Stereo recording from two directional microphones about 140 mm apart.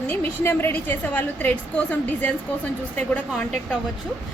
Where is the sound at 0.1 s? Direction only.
15° left (ahead or behind).